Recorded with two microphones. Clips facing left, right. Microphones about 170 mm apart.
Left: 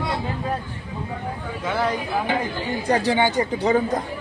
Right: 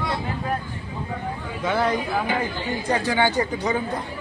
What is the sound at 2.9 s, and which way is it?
Speech, 35° left (ahead or behind).